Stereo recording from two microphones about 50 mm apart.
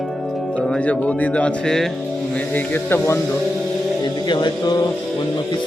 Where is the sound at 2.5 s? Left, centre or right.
Left.